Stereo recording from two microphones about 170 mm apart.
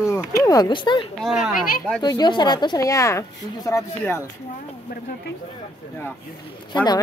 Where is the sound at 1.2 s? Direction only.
Centre (ahead or behind).